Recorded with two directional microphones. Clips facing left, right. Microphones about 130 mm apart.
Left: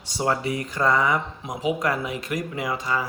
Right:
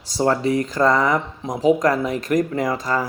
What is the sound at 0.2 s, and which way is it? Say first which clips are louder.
Speech: right 6 dB; 35° right (ahead or behind).